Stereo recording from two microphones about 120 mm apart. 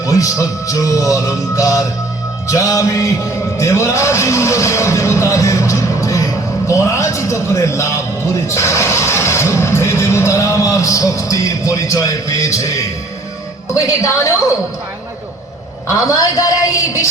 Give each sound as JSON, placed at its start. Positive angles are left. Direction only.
{"t": 0.0, "sound": "speech", "side_deg": 25}
{"t": 15.9, "sound": "speech", "side_deg": 30}